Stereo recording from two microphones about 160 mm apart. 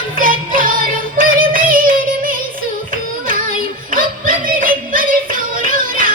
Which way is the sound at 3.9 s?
60° right (ahead or behind).